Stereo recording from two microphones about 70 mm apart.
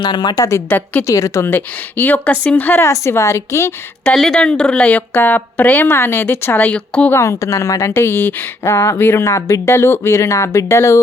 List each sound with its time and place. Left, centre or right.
0.0 s speech: left
1.0 s a woman's voice: left
1.5 s speech: left
2.8 s a woman's voice: left
4.1 s speech: centre; by 6.7 s left
6.7 s a woman's voice: centre
7.1 s a woman's voice: left
7.9 s speech: left
8.6 s speech: left